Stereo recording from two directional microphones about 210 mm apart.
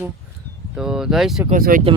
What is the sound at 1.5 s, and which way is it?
Speech, 40° right (ahead or behind).